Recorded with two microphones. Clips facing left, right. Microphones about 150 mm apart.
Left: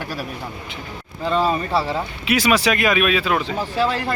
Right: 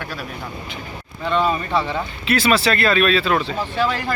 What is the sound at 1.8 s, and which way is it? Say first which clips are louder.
Speech: left 1 dB; 10° left (ahead or behind).